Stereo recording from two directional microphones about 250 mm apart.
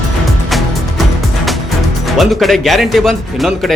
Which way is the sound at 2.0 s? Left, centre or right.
Centre.